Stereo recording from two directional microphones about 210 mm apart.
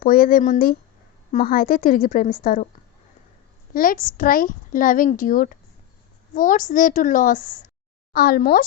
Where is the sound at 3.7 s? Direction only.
40° left (ahead or behind).